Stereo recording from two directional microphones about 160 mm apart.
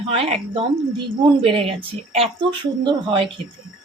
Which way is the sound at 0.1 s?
40° right (ahead or behind).